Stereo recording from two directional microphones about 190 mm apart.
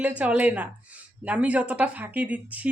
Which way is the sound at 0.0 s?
5° right (ahead or behind).